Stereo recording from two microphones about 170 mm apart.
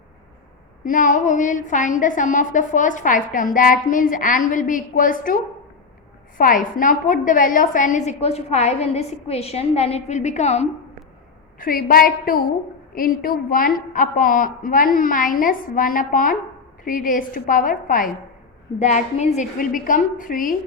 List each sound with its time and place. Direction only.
0.9 s a woman's voice: 50° left (ahead or behind)
11.6 s a woman's voice: 60° left (ahead or behind)
18.8 s a woman's voice: 45° left (ahead or behind)